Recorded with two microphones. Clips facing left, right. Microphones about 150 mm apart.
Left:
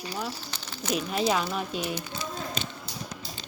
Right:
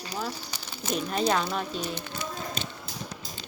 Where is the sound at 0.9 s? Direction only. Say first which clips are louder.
Even; 5° left (ahead or behind).